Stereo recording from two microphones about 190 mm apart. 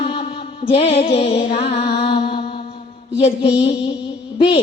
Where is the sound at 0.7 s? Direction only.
35° left (ahead or behind).